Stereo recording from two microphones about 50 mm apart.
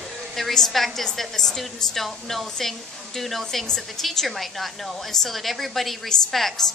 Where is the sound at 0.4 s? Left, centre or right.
Centre.